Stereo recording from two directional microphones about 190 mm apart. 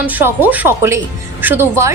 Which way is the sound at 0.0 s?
10° right (ahead or behind).